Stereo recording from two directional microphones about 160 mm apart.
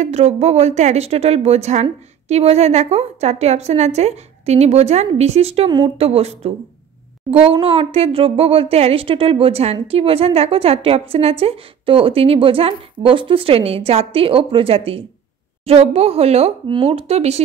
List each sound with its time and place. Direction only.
0.0 s a woman's voice: 40° right (ahead or behind)
7.6 s a woman's voice: 35° right (ahead or behind)